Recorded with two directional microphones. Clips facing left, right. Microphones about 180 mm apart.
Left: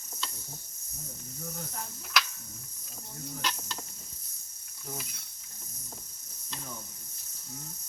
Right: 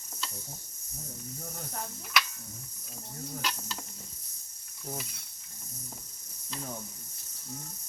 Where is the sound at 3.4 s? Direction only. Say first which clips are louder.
Left 2 dB; 5° right (ahead or behind).